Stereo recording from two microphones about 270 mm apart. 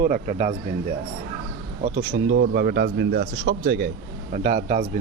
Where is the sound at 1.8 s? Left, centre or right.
Right.